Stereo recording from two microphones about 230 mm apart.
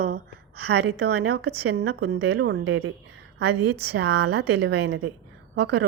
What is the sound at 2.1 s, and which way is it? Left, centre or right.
A woman's voice, right.